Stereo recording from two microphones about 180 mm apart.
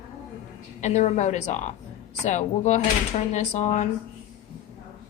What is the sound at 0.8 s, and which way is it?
A woman's voice, 40° left (ahead or behind).